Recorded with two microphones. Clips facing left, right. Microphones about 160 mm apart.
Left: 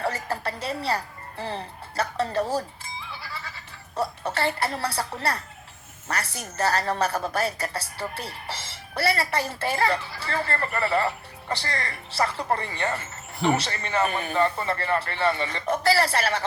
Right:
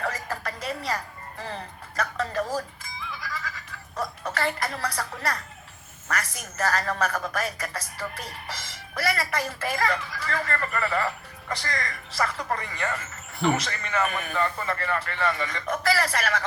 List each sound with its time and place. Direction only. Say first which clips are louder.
0.0 s music: left 3 dB; 30° left (ahead or behind)
2.0 s a woman's voice: left 3 dB; 30° left (ahead or behind)